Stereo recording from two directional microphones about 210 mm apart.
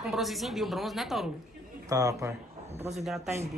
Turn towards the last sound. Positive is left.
turn(degrees=0)  # may be behind; listen again after turning